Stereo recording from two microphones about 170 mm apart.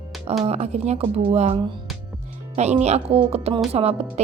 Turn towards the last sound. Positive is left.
turn(degrees=-40)  # may be behind; listen again after turning